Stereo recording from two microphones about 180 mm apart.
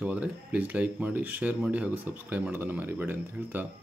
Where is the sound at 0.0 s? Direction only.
5° right (ahead or behind).